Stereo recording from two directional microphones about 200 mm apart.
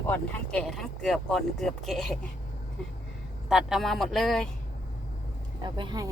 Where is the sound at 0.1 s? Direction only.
5° left (ahead or behind).